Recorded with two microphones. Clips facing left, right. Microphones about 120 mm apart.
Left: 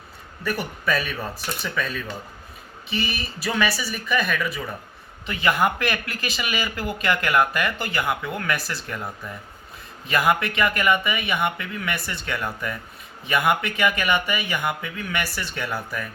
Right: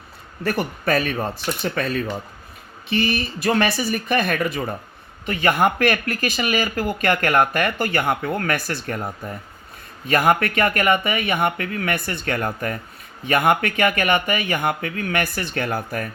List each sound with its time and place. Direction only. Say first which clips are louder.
0.5 s speech: right 4 dB; 50° right (ahead or behind)
2.9 s speech: right 7 dB; 50° right (ahead or behind)